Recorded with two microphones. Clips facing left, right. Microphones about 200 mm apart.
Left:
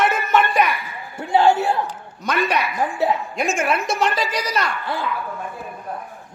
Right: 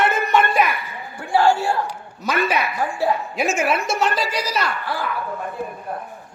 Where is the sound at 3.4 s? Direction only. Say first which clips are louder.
Right 1 dB; 5° right (ahead or behind).